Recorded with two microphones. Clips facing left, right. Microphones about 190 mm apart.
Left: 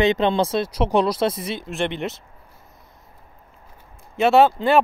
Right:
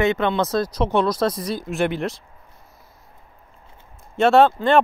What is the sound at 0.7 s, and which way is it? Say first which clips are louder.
Speech: left 1 dB; 10° left (ahead or behind).